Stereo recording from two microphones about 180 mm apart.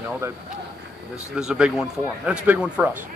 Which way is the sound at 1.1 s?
5° right (ahead or behind).